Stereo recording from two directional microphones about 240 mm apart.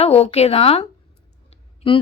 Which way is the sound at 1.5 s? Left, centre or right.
Left.